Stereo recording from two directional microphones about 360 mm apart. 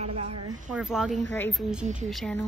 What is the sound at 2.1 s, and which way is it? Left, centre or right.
Speech, centre.